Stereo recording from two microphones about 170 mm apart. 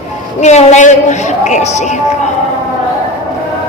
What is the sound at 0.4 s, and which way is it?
A man's voice, 40° left (ahead or behind).